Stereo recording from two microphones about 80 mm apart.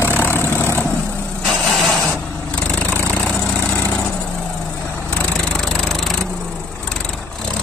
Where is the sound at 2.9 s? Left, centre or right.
Centre.